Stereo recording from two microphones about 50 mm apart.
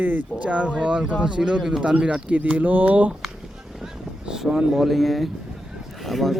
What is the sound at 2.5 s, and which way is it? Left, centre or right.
Speech, right.